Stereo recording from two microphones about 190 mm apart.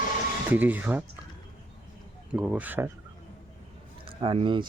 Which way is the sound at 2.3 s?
5° right (ahead or behind).